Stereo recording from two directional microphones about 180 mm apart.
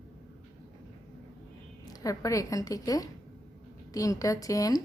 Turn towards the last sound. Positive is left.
turn(degrees=20)  # may be behind; listen again after turning